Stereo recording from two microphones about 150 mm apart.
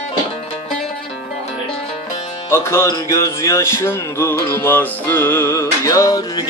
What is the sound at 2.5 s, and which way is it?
Music, 15° left (ahead or behind).